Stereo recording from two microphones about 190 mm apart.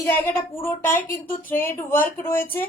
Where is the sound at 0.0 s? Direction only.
10° left (ahead or behind).